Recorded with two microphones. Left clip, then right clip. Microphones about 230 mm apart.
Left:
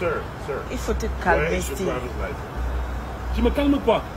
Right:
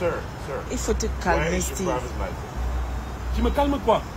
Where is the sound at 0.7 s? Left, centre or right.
Right.